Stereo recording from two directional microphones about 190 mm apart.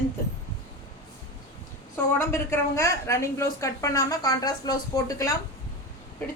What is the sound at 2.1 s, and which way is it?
A woman's voice, 15° left (ahead or behind).